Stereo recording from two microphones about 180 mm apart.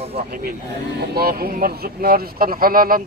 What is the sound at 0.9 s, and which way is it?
Speech, 60° right (ahead or behind).